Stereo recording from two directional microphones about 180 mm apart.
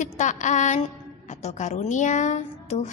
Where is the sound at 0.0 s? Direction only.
40° left (ahead or behind).